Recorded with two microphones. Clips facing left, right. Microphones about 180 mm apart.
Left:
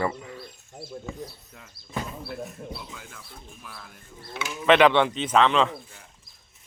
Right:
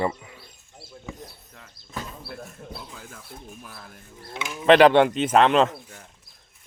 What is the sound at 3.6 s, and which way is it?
Speech, 40° right (ahead or behind).